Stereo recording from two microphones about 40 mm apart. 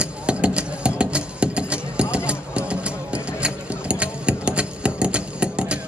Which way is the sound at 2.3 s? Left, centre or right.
Right.